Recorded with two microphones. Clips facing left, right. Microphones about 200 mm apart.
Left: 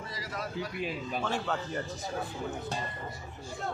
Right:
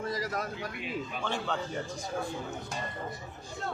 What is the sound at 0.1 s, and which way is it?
Speech, 45° right (ahead or behind).